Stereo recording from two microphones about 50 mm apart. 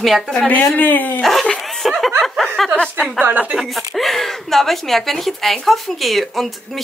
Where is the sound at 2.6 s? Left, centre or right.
Centre.